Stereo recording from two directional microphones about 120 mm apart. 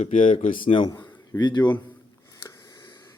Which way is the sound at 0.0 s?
90° left.